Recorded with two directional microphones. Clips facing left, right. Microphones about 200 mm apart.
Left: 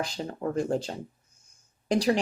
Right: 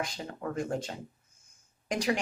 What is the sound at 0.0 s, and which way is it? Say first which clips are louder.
Speech: left 5 dB; 35° left (ahead or behind).